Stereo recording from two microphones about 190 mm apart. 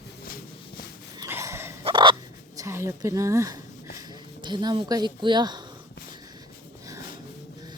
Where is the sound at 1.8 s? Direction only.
25° right (ahead or behind).